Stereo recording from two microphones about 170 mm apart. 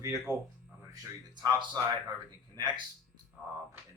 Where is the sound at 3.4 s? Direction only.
5° right (ahead or behind).